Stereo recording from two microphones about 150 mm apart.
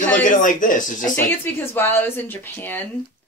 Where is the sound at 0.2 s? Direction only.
60° left (ahead or behind).